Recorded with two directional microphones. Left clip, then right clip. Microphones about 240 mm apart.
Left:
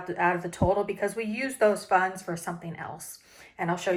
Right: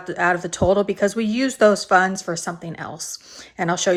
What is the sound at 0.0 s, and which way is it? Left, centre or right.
Speech, centre.